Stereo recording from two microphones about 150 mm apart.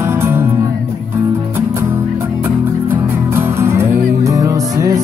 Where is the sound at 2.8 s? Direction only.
15° right (ahead or behind).